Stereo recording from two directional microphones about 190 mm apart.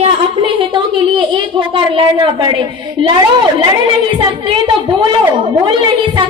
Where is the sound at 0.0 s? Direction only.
30° right (ahead or behind).